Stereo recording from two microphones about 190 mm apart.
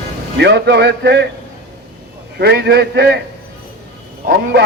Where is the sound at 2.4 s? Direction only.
60° right (ahead or behind).